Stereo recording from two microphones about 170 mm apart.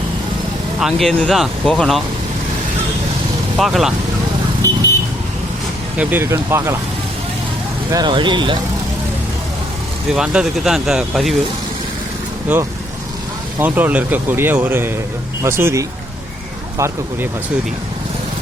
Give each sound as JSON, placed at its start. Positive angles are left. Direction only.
{"t": 0.8, "sound": "speech", "side_deg": 0}
{"t": 3.6, "sound": "speech", "side_deg": 0}
{"t": 6.0, "sound": "speech", "side_deg": -10}
{"t": 7.9, "sound": "speech", "side_deg": -25}
{"t": 10.1, "sound": "speech", "side_deg": -5}
{"t": 12.5, "sound": "speech", "side_deg": -10}